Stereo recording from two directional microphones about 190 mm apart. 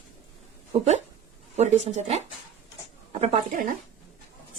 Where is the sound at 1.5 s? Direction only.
35° right (ahead or behind).